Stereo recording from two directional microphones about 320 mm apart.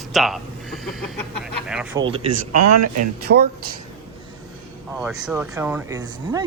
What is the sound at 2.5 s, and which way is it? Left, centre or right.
Speech, right.